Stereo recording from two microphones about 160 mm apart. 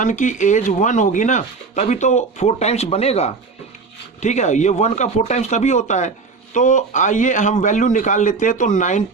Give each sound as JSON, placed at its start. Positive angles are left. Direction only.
{"t": 0.0, "sound": "speech", "side_deg": 50}